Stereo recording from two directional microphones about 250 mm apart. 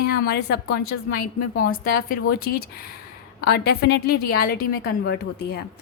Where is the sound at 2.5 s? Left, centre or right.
Left.